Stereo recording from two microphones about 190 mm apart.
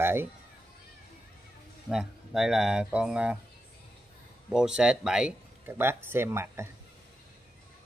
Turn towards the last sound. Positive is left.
turn(degrees=-15)  # may be behind; listen again after turning